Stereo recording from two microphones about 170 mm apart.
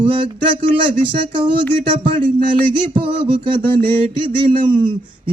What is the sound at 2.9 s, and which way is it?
Speech, 30° right (ahead or behind).